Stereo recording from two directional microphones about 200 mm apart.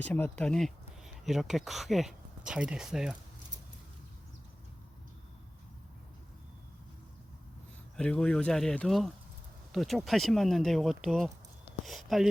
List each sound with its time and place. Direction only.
0.0 s speech: 5° left (ahead or behind)
7.9 s speech: 5° left (ahead or behind)